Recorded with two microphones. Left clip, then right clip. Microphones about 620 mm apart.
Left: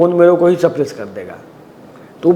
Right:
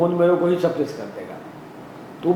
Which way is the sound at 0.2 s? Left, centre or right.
Left.